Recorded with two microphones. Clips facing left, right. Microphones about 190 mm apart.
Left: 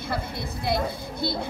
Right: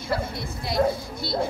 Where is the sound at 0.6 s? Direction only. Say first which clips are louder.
Right 4 dB; 55° left (ahead or behind).